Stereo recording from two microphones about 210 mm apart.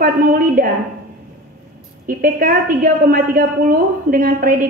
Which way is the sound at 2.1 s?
40° right (ahead or behind).